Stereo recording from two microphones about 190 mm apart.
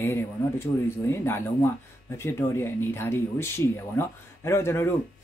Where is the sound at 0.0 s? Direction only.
15° left (ahead or behind).